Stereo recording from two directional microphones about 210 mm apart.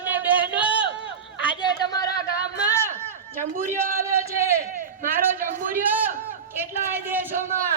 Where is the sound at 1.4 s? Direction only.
20° left (ahead or behind).